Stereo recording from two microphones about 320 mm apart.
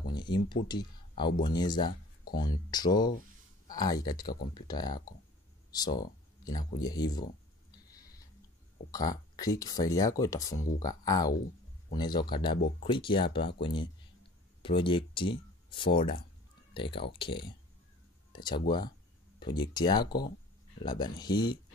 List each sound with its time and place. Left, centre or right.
0.0 s a sound: centre
0.7 s speech: centre
8.9 s speech: centre
20.1 s speech: left
20.8 s speech: centre